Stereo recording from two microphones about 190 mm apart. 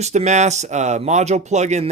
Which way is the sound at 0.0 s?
35° right (ahead or behind).